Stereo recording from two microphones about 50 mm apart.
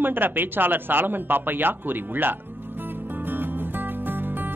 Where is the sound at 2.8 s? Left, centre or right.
Right.